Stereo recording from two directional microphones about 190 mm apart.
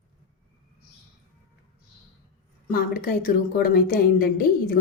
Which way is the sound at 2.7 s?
50° left (ahead or behind).